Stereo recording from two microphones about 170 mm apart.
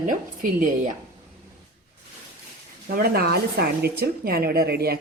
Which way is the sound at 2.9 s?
65° right (ahead or behind).